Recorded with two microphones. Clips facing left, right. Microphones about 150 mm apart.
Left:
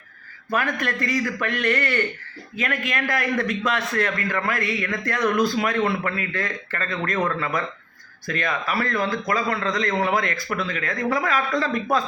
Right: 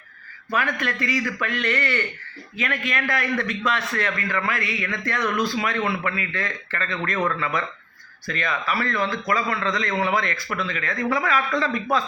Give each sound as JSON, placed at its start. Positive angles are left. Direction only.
{"t": 0.5, "sound": "a man's voice", "side_deg": 45}